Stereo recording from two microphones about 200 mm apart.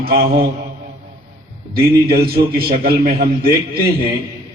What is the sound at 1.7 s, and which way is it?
A man's voice, 50° right (ahead or behind).